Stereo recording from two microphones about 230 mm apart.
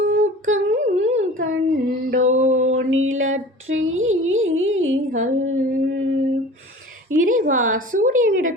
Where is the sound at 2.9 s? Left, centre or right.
Right.